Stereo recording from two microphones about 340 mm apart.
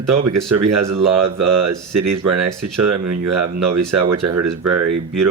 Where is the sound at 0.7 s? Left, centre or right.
Right.